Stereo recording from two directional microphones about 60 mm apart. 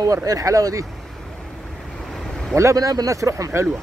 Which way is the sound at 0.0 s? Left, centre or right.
Right.